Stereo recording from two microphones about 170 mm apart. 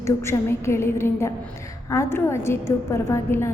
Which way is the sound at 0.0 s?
15° left (ahead or behind).